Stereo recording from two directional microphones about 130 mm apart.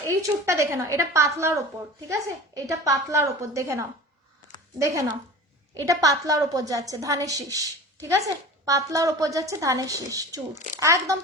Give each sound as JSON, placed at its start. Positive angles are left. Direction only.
{"t": 0.2, "sound": "a woman's voice", "side_deg": -20}